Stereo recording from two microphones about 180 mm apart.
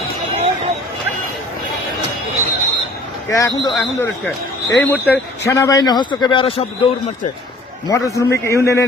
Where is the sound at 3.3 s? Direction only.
20° left (ahead or behind).